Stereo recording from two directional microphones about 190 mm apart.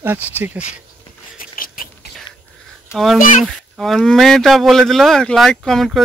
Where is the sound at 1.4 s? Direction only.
50° left (ahead or behind).